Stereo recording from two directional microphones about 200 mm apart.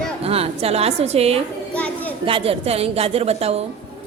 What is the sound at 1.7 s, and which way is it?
Children playing, 5° left (ahead or behind).